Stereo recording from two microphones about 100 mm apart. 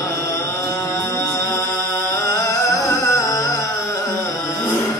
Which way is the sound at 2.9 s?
35° left (ahead or behind).